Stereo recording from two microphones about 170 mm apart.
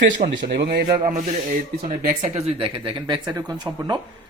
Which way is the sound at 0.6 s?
65° right (ahead or behind).